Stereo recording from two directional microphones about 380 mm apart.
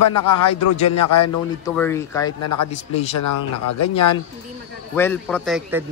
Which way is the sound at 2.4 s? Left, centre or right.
Left.